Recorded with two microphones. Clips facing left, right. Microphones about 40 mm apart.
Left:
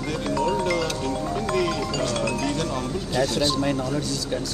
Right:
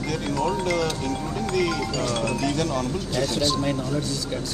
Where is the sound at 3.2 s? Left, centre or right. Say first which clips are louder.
Left 2 dB; left.